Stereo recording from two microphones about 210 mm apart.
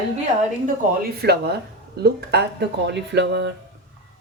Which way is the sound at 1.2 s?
50° right (ahead or behind).